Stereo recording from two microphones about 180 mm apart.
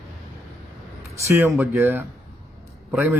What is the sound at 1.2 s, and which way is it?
A man's voice, 15° right (ahead or behind).